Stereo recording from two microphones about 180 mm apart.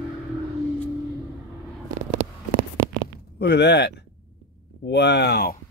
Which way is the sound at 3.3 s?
70° left (ahead or behind).